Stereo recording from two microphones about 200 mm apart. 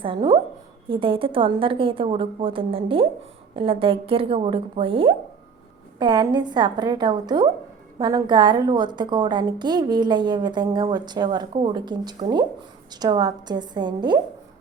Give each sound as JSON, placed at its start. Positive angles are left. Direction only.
{"t": 0.0, "sound": "a woman's voice", "side_deg": -25}